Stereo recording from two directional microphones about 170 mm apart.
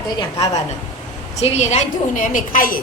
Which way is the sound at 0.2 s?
20° left (ahead or behind).